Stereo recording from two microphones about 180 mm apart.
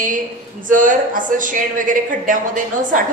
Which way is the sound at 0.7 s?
45° right (ahead or behind).